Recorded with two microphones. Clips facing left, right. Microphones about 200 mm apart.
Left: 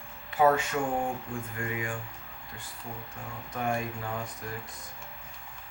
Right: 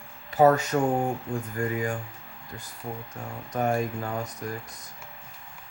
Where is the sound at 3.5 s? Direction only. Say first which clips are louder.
Right 5 dB; 40° right (ahead or behind).